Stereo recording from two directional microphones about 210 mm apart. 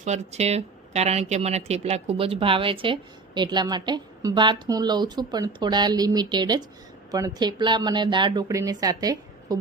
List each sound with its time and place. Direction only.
0.0 s speech: 30° right (ahead or behind)